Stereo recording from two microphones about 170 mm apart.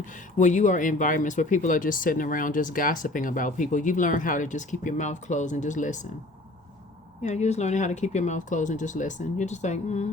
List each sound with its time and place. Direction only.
0.0 s speech: 45° left (ahead or behind)
7.2 s speech: 40° left (ahead or behind)